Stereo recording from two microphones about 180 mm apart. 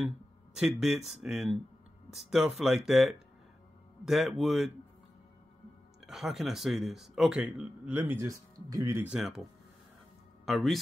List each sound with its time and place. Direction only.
0.6 s speech: centre (ahead or behind)
6.0 s speech: centre (ahead or behind)
10.4 s speech: centre (ahead or behind)